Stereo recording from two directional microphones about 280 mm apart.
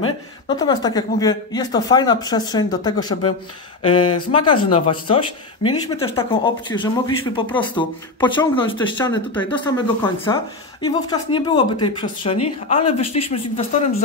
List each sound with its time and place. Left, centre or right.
0.5 s speech: centre
4.1 s speech: left
4.8 s speech: centre